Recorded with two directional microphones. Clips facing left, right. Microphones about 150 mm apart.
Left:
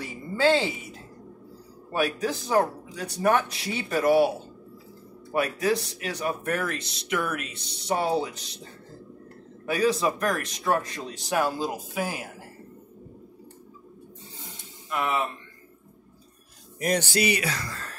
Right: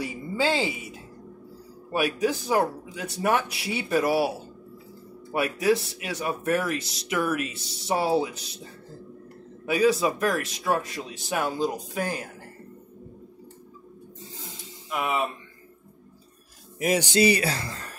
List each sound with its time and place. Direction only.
0.0 s a sound: 10° right (ahead or behind)
1.9 s speech: 10° right (ahead or behind)
5.7 s speech: 5° right (ahead or behind)
9.7 s speech: 10° right (ahead or behind)
14.9 s speech: 5° right (ahead or behind)
16.8 s speech: centre (ahead or behind)
17.2 s speech: 35° right (ahead or behind)